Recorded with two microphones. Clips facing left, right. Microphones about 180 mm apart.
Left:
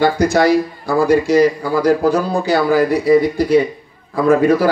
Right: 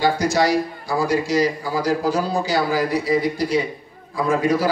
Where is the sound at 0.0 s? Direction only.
55° left (ahead or behind).